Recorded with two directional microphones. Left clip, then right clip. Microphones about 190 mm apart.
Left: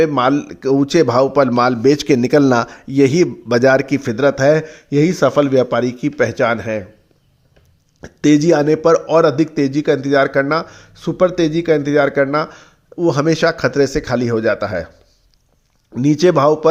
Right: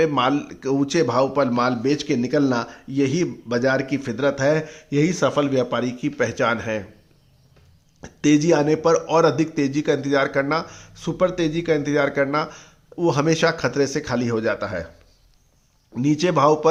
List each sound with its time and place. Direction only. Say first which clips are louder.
0.0 s a man's voice: left 5 dB; 25° left (ahead or behind)
8.0 s speech: left 5 dB; 25° left (ahead or behind)
16.0 s speech: left 6 dB; 30° left (ahead or behind)